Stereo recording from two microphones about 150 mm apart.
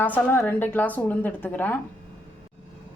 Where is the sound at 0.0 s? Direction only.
10° left (ahead or behind).